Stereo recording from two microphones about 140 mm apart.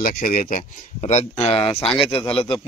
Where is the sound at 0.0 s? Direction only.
90° left.